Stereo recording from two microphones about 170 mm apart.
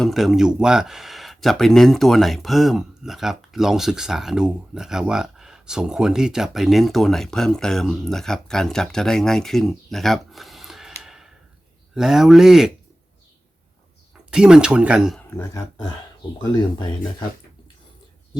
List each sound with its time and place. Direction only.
0.0 s speech: centre (ahead or behind)
14.3 s speech: 5° right (ahead or behind)
15.2 s speech: 15° left (ahead or behind)